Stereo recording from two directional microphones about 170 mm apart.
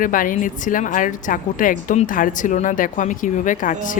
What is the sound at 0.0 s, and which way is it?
A woman's voice, 55° left (ahead or behind).